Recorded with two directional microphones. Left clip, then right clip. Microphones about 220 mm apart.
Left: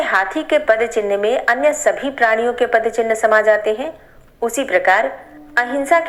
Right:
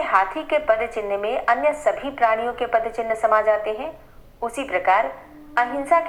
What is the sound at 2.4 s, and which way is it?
Speech, 50° left (ahead or behind).